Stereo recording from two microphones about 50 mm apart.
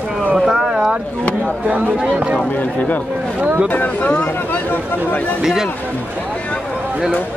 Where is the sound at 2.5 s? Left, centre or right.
Left.